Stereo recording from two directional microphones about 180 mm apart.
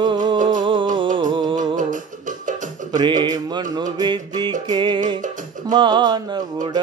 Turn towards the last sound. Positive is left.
turn(degrees=-25)  # may be behind; listen again after turning